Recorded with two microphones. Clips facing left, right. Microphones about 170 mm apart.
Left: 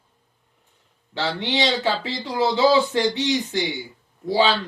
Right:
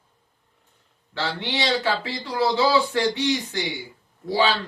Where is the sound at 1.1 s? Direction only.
20° left (ahead or behind).